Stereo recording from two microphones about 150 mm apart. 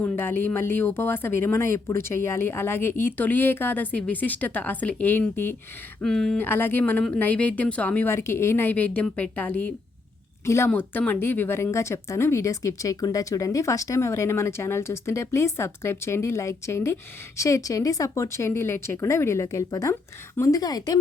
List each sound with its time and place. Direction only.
0.0 s speech: 15° left (ahead or behind)